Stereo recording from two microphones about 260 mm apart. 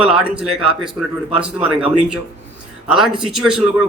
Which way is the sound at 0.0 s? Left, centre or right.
Centre.